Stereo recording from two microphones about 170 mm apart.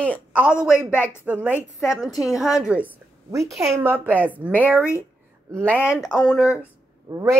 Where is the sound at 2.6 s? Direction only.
10° right (ahead or behind).